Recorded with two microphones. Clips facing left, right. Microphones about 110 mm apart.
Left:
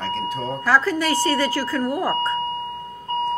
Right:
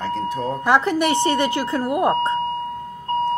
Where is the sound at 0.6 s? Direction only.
20° right (ahead or behind).